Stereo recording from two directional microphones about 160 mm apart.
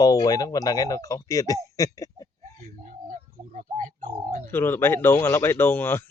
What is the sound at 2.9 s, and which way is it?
Bird, 55° right (ahead or behind).